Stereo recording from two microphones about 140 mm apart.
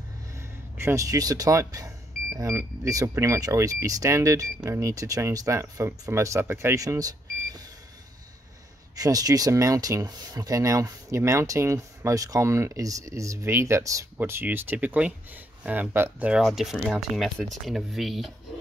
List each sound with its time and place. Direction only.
0.4 s speech: 20° right (ahead or behind)
8.9 s speech: 25° right (ahead or behind); by 18.3 s centre (ahead or behind)